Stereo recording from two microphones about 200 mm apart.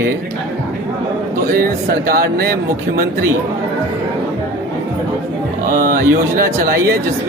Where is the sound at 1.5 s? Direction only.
50° right (ahead or behind).